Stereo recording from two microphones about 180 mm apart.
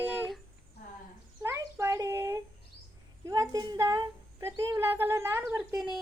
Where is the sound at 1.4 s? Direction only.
20° right (ahead or behind).